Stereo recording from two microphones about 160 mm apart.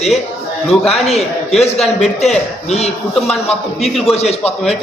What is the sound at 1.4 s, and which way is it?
Speech, 40° left (ahead or behind).